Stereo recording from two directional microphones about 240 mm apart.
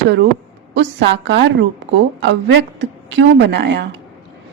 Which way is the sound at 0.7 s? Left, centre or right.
Right.